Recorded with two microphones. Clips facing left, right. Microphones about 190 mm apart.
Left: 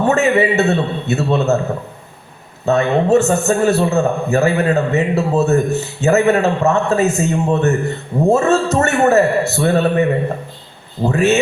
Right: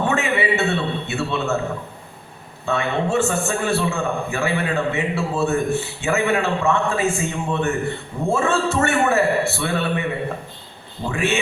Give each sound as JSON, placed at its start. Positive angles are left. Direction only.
{"t": 0.1, "sound": "a man's voice", "side_deg": 40}
{"t": 2.6, "sound": "a man's voice", "side_deg": 40}